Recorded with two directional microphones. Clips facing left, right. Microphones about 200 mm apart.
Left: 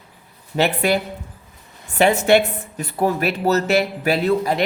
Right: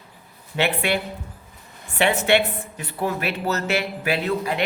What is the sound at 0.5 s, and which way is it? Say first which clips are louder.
Speech: left 4 dB; 40° left (ahead or behind).